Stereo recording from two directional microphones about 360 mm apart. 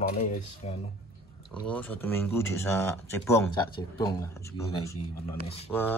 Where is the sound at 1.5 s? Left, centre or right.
Centre.